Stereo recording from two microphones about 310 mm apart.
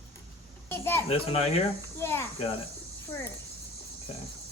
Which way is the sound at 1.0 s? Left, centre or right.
Centre.